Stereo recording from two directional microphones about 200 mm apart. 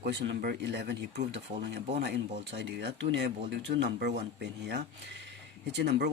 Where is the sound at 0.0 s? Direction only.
60° right (ahead or behind).